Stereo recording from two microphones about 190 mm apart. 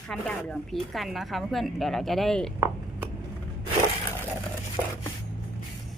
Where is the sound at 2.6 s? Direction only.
15° right (ahead or behind).